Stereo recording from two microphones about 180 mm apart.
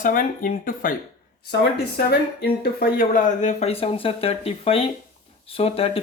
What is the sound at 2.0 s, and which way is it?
Speech, 60° left (ahead or behind).